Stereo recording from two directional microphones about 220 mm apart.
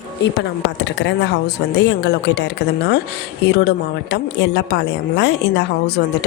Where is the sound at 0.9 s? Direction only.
55° left (ahead or behind).